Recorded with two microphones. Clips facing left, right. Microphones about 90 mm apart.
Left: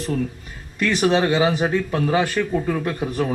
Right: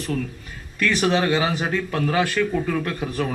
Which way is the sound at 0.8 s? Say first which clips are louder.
Left 2 dB; 20° left (ahead or behind).